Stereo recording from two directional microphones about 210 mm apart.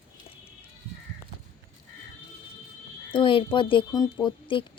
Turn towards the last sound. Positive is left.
turn(degrees=25)  # may be behind; listen again after turning